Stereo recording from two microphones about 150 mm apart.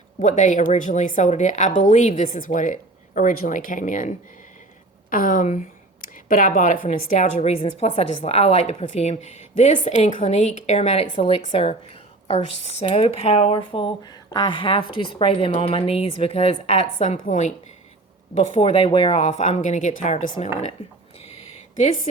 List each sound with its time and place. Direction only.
0.2 s speech: 55° left (ahead or behind)
5.1 s speech: 70° left (ahead or behind); by 17.5 s 50° left (ahead or behind)
18.3 s speech: 40° left (ahead or behind)
21.2 s a sound: 45° left (ahead or behind)